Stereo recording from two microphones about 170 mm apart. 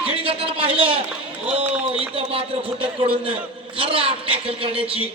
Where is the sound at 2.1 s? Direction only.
35° right (ahead or behind).